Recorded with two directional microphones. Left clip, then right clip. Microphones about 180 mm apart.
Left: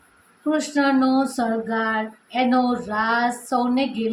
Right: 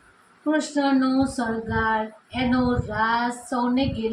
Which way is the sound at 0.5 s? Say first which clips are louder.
Left 2 dB; 45° left (ahead or behind).